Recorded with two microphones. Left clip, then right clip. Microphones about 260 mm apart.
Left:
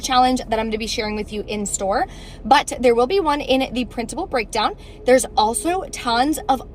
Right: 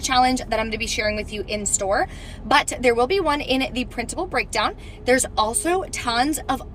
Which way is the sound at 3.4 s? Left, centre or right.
Centre.